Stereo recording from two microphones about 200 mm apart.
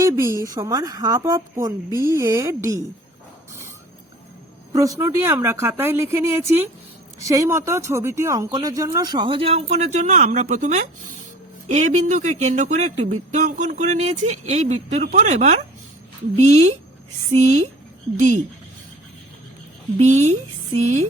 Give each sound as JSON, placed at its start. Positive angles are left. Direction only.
{"t": 0.0, "sound": "speech", "side_deg": -15}
{"t": 4.7, "sound": "speech", "side_deg": -15}
{"t": 20.0, "sound": "speech", "side_deg": -35}